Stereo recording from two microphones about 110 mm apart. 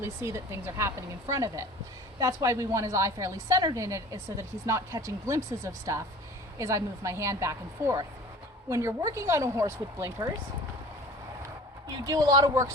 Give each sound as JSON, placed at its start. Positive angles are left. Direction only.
{"t": 0.0, "sound": "a woman's voice", "side_deg": -25}
{"t": 11.9, "sound": "speech", "side_deg": -35}